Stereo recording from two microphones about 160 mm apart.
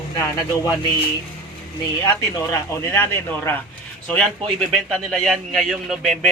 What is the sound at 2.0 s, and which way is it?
Speech, 25° left (ahead or behind).